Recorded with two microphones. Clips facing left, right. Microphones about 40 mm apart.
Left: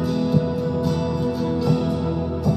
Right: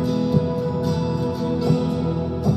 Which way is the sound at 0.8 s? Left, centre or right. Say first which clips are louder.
Even; centre.